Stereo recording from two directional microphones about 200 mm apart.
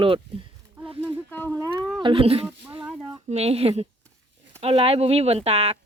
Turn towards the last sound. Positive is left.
turn(degrees=-30)  # may be behind; listen again after turning